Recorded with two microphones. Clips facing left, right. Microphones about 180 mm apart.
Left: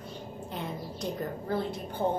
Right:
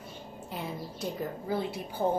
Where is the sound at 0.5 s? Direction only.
5° right (ahead or behind).